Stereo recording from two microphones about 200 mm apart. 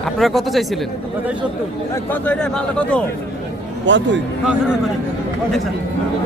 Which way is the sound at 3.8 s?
65° right (ahead or behind).